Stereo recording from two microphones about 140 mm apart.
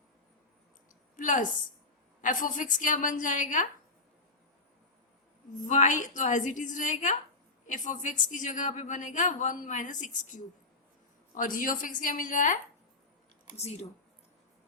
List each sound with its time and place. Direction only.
1.1 s a woman's voice: 70° left (ahead or behind)
5.5 s a woman's voice: 60° left (ahead or behind)
13.6 s speech: 50° left (ahead or behind)